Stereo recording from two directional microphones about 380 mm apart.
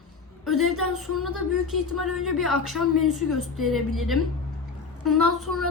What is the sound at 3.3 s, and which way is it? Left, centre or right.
Speech, right.